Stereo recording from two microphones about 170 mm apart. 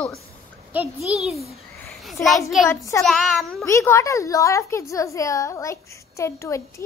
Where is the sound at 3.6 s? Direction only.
15° left (ahead or behind).